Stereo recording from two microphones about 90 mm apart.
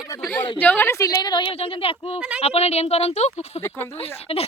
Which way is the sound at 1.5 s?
90° left.